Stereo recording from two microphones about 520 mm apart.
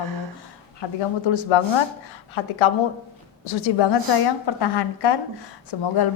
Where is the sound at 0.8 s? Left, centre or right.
Left.